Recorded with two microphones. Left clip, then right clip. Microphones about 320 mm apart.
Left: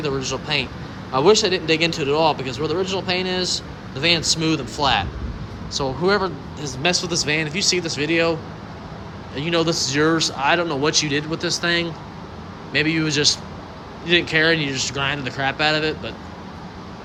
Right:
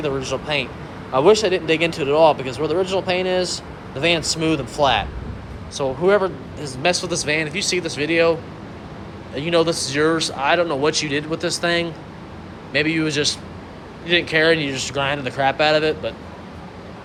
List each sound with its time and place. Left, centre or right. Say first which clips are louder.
0.3 s speech: right 1 dB; centre
4.2 s speech: even; left
4.8 s a man's voice: right 2 dB; centre